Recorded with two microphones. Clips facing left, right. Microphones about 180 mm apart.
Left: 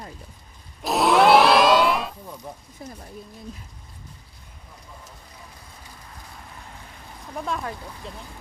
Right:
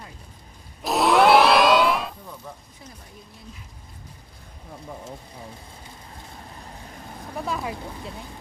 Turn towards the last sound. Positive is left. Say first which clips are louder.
# even
turn(degrees=-5)  # may be behind; listen again after turning